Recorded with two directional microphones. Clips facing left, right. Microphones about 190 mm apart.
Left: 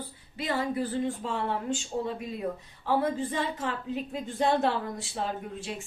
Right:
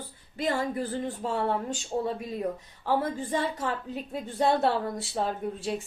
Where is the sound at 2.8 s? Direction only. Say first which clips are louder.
Left 1 dB; 45° right (ahead or behind).